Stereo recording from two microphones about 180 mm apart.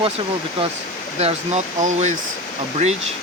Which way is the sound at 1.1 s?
35° right (ahead or behind).